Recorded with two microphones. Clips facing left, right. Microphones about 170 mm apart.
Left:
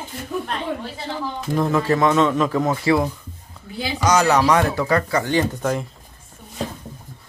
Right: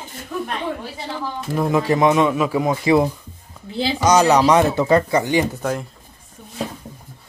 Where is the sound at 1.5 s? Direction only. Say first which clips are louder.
Right 1 dB; 10° right (ahead or behind).